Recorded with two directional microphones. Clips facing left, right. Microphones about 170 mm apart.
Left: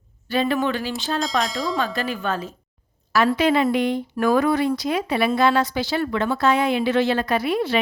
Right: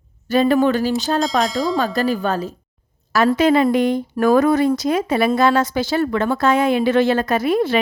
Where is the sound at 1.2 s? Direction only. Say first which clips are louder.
Right 5 dB; centre (ahead or behind).